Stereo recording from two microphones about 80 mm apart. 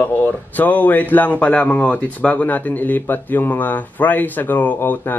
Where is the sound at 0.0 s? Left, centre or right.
Centre.